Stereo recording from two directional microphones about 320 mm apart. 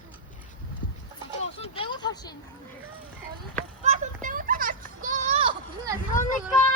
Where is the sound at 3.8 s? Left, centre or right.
Right.